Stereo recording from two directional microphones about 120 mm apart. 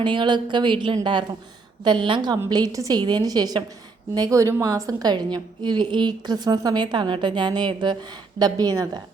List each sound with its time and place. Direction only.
0.0 s a woman's voice: 40° right (ahead or behind)